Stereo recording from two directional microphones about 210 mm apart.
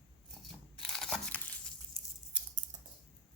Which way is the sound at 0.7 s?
Centre (ahead or behind).